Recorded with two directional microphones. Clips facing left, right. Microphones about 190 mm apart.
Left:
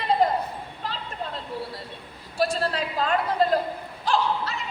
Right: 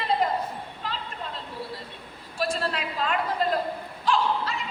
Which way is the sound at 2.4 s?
40° left (ahead or behind).